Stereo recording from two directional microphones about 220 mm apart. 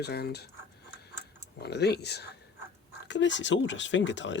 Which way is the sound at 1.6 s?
50° left (ahead or behind).